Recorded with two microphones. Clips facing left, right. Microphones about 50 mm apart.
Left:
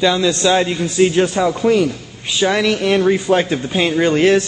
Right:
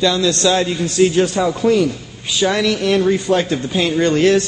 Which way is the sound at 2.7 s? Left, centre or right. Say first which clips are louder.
Left 1 dB; left.